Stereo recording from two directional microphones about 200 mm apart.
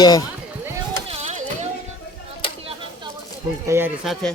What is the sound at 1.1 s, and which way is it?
Music, 35° right (ahead or behind).